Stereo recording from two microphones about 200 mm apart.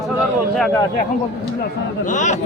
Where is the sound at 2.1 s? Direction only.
35° left (ahead or behind).